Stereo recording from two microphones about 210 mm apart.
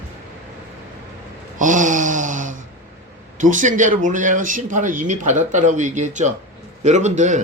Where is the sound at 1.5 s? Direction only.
35° right (ahead or behind).